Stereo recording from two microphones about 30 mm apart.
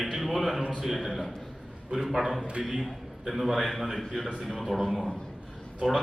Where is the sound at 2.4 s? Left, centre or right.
Right.